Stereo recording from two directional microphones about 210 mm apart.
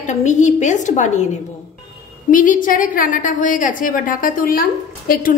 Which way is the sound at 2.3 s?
40° left (ahead or behind).